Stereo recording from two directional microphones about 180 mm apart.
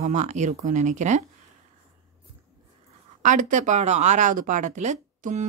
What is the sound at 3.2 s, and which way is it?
A woman's voice, 40° right (ahead or behind).